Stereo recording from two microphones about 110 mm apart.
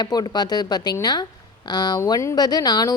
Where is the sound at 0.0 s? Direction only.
40° left (ahead or behind).